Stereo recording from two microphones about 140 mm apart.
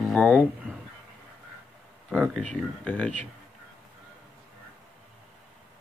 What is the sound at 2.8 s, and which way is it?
Speech, 10° left (ahead or behind).